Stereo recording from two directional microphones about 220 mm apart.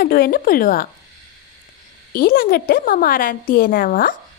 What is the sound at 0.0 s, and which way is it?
Speech, 40° left (ahead or behind).